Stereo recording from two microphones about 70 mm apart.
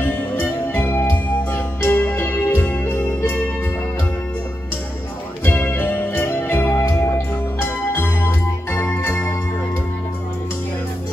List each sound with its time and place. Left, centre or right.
0.0 s music: left
5.4 s music: left
7.6 s music: left